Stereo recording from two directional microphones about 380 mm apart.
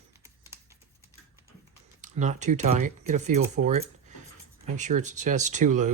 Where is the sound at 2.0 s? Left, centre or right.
Centre.